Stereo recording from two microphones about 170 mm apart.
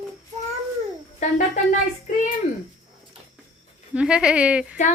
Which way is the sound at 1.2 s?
45° left (ahead or behind).